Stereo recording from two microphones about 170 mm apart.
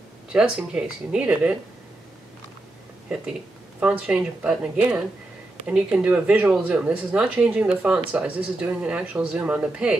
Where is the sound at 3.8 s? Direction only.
5° right (ahead or behind).